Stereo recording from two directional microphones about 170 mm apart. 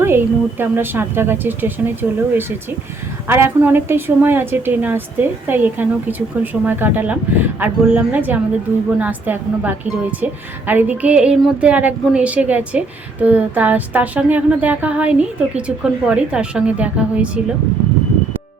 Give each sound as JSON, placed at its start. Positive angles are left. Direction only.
{"t": 0.0, "sound": "speech", "side_deg": -15}